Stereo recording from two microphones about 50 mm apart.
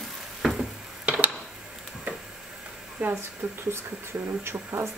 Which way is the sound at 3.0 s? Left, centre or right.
Right.